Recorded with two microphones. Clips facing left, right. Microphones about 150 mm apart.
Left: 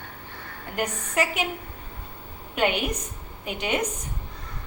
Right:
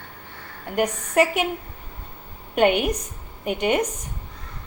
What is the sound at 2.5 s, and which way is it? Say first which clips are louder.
A woman's voice: right 6 dB; 50° right (ahead or behind).